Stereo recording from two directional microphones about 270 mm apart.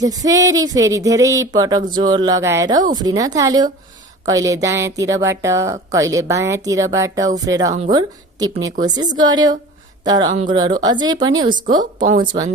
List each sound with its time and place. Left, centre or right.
0.0 s speech: centre